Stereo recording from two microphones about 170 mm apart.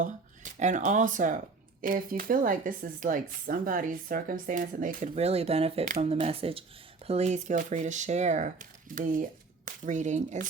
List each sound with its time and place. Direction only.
0.0 s speech: 45° right (ahead or behind)